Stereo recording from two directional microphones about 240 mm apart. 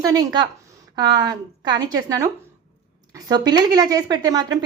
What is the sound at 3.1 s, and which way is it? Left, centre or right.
Speech, centre.